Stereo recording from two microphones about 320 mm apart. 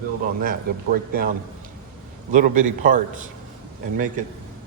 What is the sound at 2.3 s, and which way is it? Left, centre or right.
Speech, right.